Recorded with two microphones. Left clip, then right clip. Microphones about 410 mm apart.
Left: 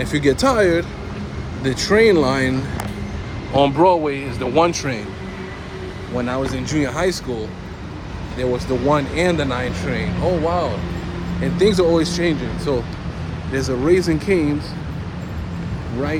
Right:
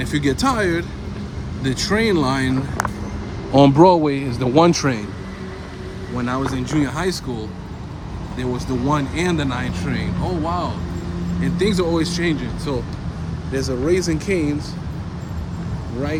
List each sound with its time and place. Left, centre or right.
0.0 s speech: centre
3.5 s a man's voice: right
6.1 s speech: centre
8.4 s a man's voice: centre
13.6 s speech: centre